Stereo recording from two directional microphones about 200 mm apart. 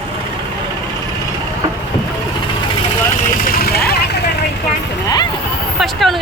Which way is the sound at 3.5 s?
50° left (ahead or behind).